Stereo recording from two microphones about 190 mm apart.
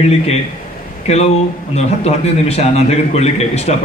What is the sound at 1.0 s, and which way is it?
A man's voice, 35° left (ahead or behind).